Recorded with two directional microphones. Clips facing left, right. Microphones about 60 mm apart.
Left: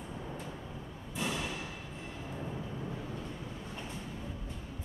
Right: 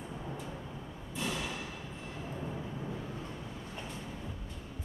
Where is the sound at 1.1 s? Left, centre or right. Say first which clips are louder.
Left 1 dB; centre.